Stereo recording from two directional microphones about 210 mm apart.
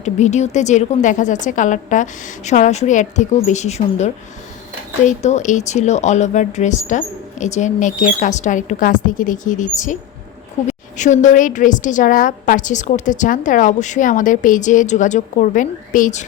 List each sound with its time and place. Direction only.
0.0 s a woman's voice: 35° left (ahead or behind)